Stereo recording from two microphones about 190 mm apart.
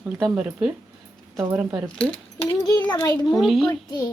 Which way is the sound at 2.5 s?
15° left (ahead or behind).